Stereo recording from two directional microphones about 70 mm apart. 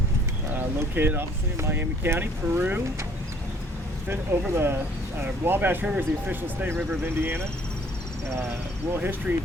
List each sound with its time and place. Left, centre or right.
0.5 s speech: right
4.1 s speech: right
9.0 s speech: right